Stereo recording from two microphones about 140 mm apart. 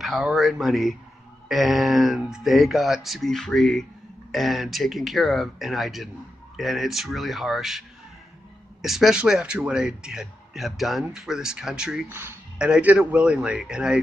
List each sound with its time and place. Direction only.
0.0 s speech: centre (ahead or behind)
8.8 s speech: centre (ahead or behind)
12.1 s speech: 15° right (ahead or behind)